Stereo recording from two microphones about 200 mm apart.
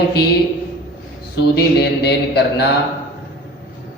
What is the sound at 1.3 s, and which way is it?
A man's voice, 55° left (ahead or behind).